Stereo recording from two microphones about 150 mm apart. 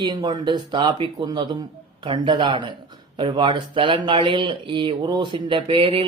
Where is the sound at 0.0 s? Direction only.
30° right (ahead or behind).